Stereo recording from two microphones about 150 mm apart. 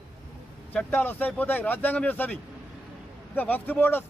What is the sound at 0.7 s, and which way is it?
A man's voice, 10° left (ahead or behind).